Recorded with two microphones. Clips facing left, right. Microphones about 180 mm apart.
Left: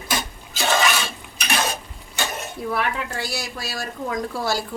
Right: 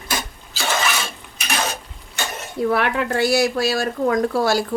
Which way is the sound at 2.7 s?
65° right (ahead or behind).